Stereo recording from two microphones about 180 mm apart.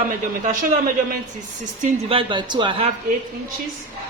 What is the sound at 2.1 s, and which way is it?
Speech, 30° right (ahead or behind).